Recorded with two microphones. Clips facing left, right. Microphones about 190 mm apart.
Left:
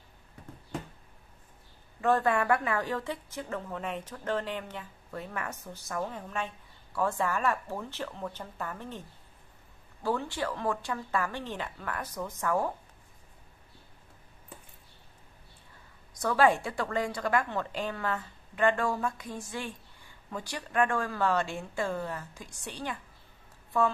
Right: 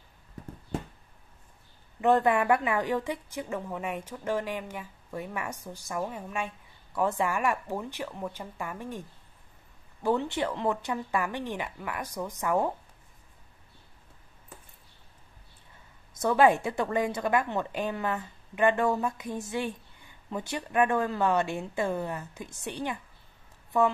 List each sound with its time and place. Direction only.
2.0 s a woman's voice: 20° right (ahead or behind)
10.0 s a woman's voice: 20° right (ahead or behind)
16.2 s a woman's voice: 20° right (ahead or behind)